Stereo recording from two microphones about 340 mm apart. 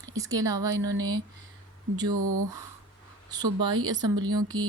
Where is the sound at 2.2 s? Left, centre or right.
Right.